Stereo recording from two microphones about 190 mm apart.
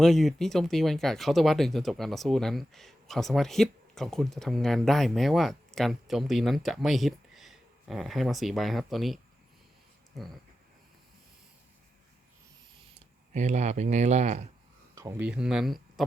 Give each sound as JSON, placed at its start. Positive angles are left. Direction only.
{"t": 0.0, "sound": "speech", "side_deg": 0}
{"t": 10.1, "sound": "a sound", "side_deg": 0}
{"t": 13.3, "sound": "speech", "side_deg": -40}
{"t": 14.9, "sound": "speech", "side_deg": -10}